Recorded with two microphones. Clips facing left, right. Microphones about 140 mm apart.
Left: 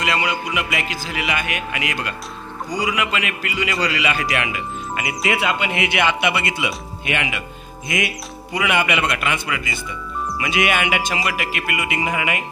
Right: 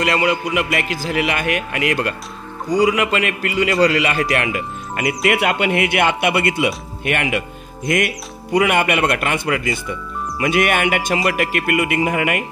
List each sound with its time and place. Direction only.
0.0 s music: 50° right (ahead or behind)
0.6 s speech: 50° right (ahead or behind)